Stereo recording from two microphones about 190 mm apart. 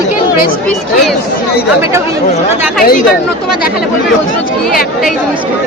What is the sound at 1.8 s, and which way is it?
Speech, 15° right (ahead or behind).